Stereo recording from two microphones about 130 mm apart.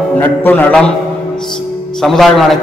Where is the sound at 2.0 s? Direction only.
Centre (ahead or behind).